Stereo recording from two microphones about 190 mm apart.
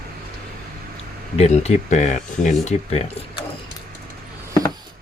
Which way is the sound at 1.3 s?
35° left (ahead or behind).